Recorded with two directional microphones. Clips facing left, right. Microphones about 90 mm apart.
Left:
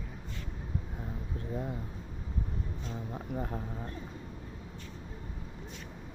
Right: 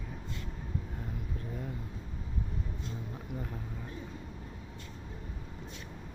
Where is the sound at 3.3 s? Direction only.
40° left (ahead or behind).